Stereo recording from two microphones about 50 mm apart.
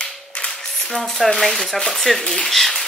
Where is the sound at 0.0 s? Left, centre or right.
Left.